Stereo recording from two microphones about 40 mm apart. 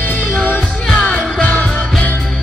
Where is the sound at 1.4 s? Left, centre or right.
Left.